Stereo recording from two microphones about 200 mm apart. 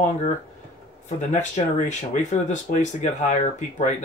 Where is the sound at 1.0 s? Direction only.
40° left (ahead or behind).